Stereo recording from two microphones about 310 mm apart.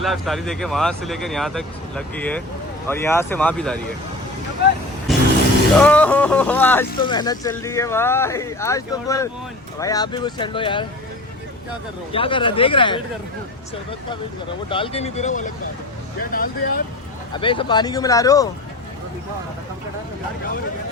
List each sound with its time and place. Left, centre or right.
0.0 s speech: centre
5.1 s vehicle: centre
5.7 s speech: centre
12.1 s speech: centre
14.7 s speech: centre
17.3 s speech: centre